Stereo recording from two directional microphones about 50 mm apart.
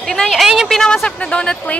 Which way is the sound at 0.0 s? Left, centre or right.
Centre.